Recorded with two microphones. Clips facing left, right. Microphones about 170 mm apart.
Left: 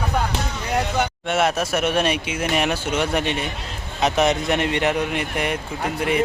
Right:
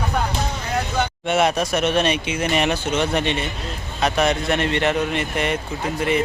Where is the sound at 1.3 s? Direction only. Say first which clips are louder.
Right 3 dB; centre (ahead or behind).